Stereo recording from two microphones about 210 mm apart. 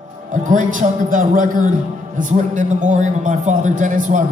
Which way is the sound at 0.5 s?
40° right (ahead or behind).